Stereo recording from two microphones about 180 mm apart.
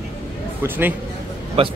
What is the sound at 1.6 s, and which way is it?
Speech, 35° right (ahead or behind).